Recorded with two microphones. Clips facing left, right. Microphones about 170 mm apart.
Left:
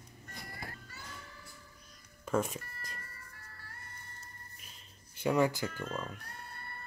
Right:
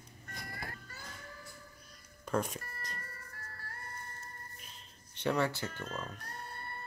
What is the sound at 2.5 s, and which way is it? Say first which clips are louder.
Music: right 1 dB; 40° right (ahead or behind).